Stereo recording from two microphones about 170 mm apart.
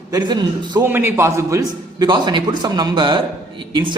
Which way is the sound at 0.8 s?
15° right (ahead or behind).